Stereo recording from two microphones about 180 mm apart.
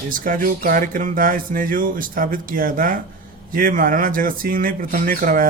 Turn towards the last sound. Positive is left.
turn(degrees=-50)  # may be behind; listen again after turning